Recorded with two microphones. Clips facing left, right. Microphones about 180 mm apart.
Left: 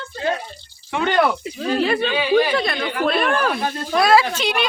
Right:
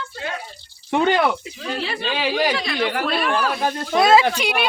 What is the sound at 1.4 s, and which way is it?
Speech, 40° left (ahead or behind).